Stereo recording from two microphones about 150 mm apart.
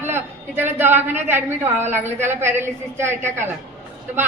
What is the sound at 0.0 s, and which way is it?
A woman's voice, 15° right (ahead or behind).